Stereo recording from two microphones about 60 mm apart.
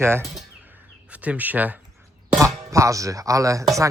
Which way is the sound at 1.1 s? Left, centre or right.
Right.